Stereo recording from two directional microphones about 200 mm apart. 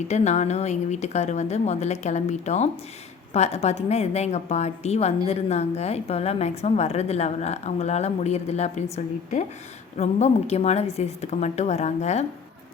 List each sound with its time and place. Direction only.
0.1 s a woman's voice: 35° left (ahead or behind)
10.0 s a woman's voice: 35° left (ahead or behind)